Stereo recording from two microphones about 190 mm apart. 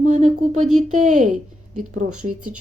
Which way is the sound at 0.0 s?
40° right (ahead or behind).